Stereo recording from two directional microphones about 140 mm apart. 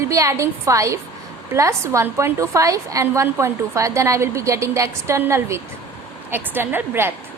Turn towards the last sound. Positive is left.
turn(degrees=-15)  # may be behind; listen again after turning